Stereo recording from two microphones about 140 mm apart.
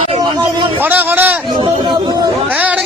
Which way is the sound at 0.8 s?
15° right (ahead or behind).